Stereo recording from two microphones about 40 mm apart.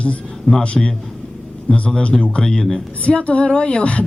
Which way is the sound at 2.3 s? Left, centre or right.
Centre.